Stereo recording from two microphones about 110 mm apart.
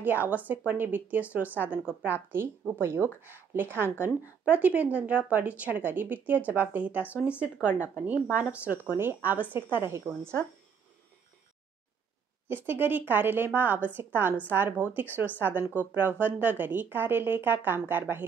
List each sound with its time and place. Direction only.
0.0 s speech: 15° right (ahead or behind)
12.6 s speech: 20° right (ahead or behind)